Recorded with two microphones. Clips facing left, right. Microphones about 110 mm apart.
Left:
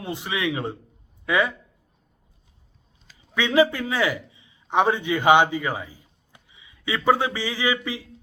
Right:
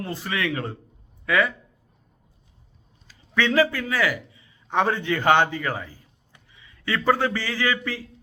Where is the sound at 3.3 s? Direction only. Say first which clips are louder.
Left 1 dB; 15° left (ahead or behind).